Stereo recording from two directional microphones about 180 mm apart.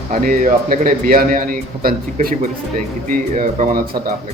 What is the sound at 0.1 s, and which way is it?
A man's voice, 50° right (ahead or behind).